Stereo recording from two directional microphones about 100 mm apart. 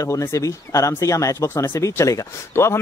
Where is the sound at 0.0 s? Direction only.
30° left (ahead or behind).